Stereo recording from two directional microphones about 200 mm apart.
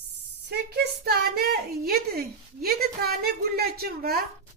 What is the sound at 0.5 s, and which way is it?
A woman's voice, 55° right (ahead or behind).